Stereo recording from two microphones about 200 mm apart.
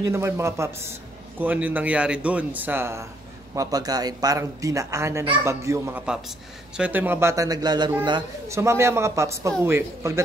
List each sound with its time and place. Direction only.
0.0 s a man's voice: 15° right (ahead or behind)